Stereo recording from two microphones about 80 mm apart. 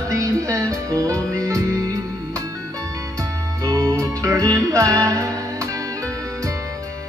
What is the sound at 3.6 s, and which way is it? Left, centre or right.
Music, right.